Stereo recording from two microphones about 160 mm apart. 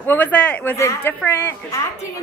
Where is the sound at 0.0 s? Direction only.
10° left (ahead or behind).